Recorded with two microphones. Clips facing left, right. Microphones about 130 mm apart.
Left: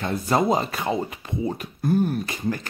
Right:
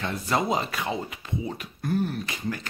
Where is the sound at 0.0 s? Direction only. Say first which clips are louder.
Left 5 dB; 40° left (ahead or behind).